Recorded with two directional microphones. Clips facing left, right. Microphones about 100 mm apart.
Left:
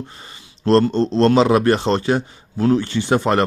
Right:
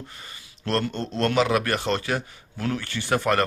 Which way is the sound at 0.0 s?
30° left (ahead or behind).